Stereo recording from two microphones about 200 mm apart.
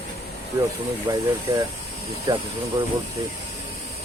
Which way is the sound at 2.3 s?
20° right (ahead or behind).